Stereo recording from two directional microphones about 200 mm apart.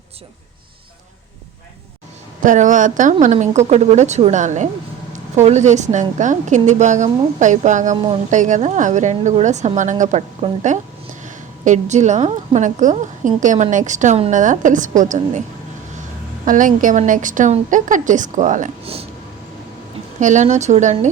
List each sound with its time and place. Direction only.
2.4 s a woman's voice: 40° right (ahead or behind)
16.5 s a woman's voice: 40° right (ahead or behind)
20.1 s a woman's voice: 40° right (ahead or behind)